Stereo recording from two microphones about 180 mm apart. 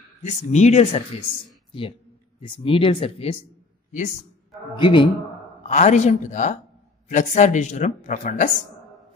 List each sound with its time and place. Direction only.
0.2 s speech: 40° left (ahead or behind)
4.7 s speech: 25° left (ahead or behind)
5.7 s speech: 40° left (ahead or behind)